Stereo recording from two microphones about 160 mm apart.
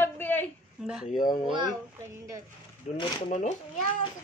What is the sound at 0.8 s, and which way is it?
Speech, 5° right (ahead or behind).